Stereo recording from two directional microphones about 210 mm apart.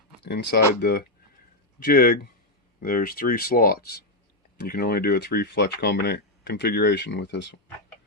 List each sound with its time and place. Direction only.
0.3 s speech: 50° left (ahead or behind)